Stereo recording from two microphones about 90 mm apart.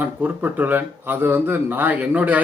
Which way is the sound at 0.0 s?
20° right (ahead or behind).